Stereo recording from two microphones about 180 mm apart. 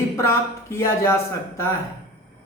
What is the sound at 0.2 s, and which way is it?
Speech, 15° left (ahead or behind).